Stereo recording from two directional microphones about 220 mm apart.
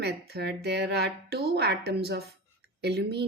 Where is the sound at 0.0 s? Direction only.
50° right (ahead or behind).